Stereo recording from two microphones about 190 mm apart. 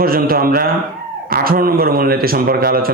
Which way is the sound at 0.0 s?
50° right (ahead or behind).